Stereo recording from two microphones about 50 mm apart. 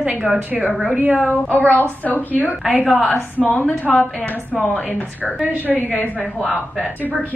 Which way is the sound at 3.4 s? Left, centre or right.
Left.